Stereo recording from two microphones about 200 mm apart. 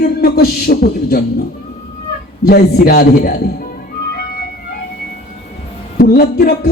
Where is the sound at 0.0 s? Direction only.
50° left (ahead or behind).